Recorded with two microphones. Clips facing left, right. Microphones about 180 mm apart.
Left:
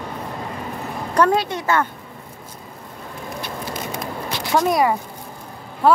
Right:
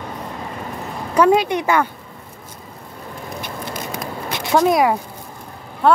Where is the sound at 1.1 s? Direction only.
10° right (ahead or behind).